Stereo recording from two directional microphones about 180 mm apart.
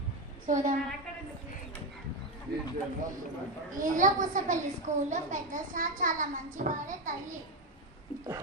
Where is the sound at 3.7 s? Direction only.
45° right (ahead or behind).